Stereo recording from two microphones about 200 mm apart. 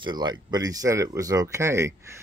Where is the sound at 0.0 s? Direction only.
20° right (ahead or behind).